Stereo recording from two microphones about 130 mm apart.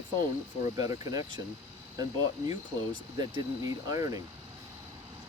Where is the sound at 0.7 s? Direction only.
25° right (ahead or behind).